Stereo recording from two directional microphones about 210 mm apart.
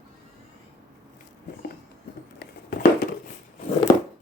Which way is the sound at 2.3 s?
50° left (ahead or behind).